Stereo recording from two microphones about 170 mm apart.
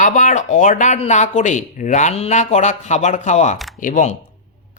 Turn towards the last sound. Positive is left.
turn(degrees=50)  # may be behind; listen again after turning